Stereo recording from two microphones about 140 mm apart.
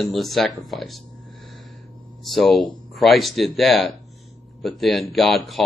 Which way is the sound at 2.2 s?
Centre (ahead or behind).